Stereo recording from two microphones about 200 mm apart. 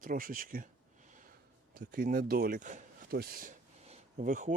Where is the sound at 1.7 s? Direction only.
45° right (ahead or behind).